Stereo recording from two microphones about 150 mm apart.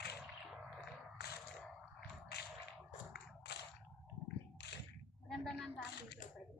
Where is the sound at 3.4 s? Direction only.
90° left.